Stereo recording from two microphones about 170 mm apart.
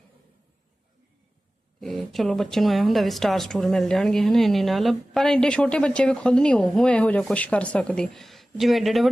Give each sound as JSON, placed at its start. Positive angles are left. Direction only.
{"t": 1.8, "sound": "speech", "side_deg": 0}